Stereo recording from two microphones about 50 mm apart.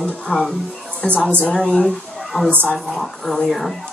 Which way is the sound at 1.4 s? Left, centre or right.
Centre.